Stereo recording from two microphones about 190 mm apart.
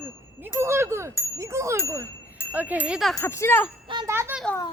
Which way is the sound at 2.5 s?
10° right (ahead or behind).